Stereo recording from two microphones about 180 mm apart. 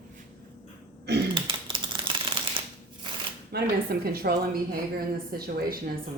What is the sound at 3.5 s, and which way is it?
Speech, 60° right (ahead or behind).